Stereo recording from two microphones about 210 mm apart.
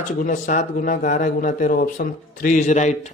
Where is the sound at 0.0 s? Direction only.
40° left (ahead or behind).